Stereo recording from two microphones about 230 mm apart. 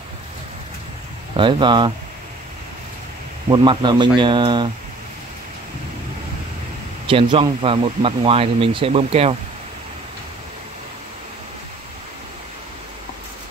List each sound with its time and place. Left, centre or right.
1.3 s speech: right
3.4 s speech: centre
7.1 s speech: right